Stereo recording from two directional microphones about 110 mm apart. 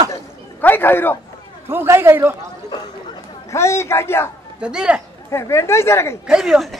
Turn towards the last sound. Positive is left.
turn(degrees=0)  # may be behind; listen again after turning